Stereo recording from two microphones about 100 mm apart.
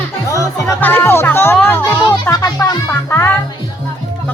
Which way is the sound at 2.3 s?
35° left (ahead or behind).